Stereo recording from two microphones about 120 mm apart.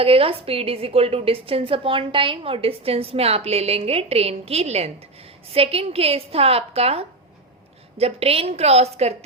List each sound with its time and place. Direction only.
0.0 s a woman's voice: 50° right (ahead or behind)